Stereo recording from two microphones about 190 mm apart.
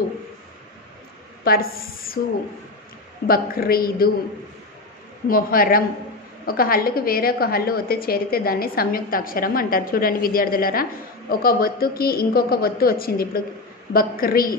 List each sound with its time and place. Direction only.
1.4 s a woman's voice: 50° left (ahead or behind)
3.3 s a woman's voice: 50° left (ahead or behind)
5.3 s a woman's voice: 50° left (ahead or behind)